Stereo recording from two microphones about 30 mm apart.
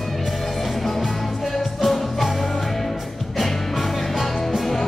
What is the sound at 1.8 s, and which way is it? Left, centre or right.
Music, centre.